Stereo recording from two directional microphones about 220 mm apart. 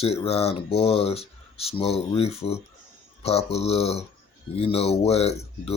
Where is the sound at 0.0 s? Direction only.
25° left (ahead or behind).